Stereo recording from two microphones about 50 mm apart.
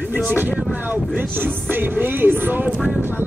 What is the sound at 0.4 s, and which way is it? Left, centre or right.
Speech, right.